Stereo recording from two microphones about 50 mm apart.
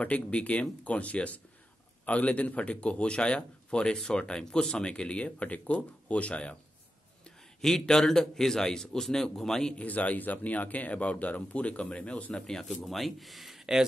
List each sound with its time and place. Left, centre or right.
0.0 s speech: left; by 4.8 s centre
4.8 s speech: left
7.2 s a man's voice: centre
9.8 s speech: left
12.4 s a man's voice: centre
12.8 s speech: centre